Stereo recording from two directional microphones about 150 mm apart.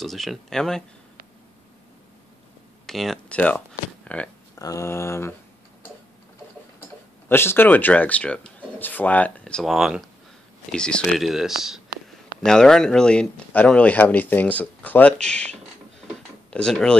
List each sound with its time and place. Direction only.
0.0 s speech: centre (ahead or behind)
2.9 s speech: centre (ahead or behind)
4.6 s speech: 20° left (ahead or behind)
7.2 s speech: 15° left (ahead or behind)